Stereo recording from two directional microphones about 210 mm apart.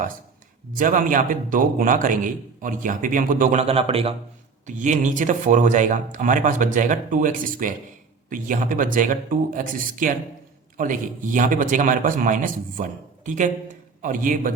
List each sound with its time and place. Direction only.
0.8 s a man's voice: 40° right (ahead or behind)